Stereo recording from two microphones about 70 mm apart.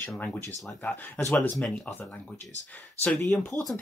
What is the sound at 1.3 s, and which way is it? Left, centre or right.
Speech, centre.